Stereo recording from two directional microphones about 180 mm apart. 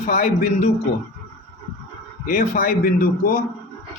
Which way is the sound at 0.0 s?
50° left (ahead or behind).